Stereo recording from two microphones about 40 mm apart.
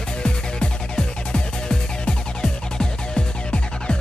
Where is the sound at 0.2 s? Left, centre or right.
Left.